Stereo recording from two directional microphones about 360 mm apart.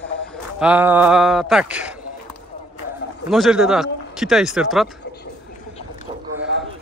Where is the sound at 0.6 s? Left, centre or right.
Centre.